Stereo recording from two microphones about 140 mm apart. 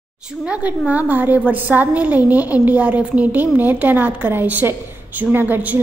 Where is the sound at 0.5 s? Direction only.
10° right (ahead or behind).